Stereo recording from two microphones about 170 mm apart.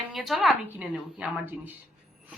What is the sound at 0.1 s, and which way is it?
Speech, centre (ahead or behind).